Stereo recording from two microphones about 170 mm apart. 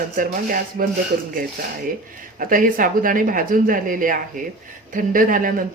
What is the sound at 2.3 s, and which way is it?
Speech, 55° right (ahead or behind).